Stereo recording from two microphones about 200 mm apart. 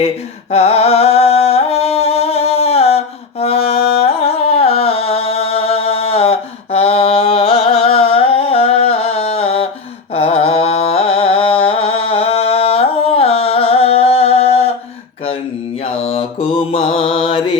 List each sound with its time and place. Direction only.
0.5 s singing: 30° left (ahead or behind)
3.4 s music: 30° left (ahead or behind)
10.2 s a sound: 30° left (ahead or behind)
16.0 s mantra: 30° left (ahead or behind)